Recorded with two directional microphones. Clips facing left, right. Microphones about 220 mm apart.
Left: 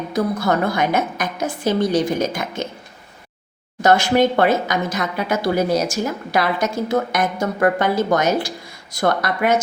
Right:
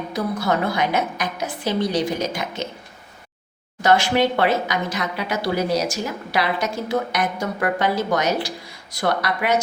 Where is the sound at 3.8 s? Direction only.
45° left (ahead or behind).